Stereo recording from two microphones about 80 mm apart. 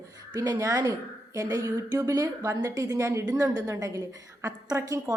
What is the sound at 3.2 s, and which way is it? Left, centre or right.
Speech, right.